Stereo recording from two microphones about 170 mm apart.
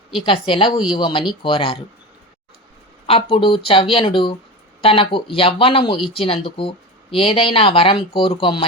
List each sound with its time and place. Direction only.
0.3 s speech: 30° left (ahead or behind)
3.1 s speech: 35° left (ahead or behind)